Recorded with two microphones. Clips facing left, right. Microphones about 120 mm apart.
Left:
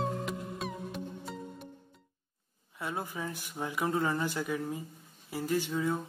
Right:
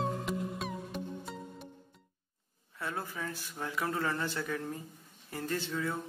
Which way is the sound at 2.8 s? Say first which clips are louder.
Left 2 dB; 15° left (ahead or behind).